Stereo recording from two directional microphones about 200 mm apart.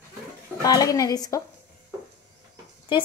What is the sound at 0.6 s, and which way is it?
Speech, 20° left (ahead or behind).